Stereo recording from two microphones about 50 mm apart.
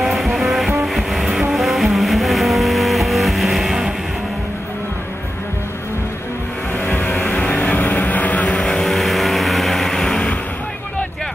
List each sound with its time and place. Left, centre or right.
0.0 s music: centre
6.8 s music: left
7.3 s vehicle: left
8.6 s vehicle: centre